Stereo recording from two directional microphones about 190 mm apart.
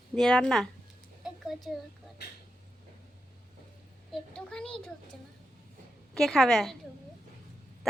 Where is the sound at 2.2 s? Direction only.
60° left (ahead or behind).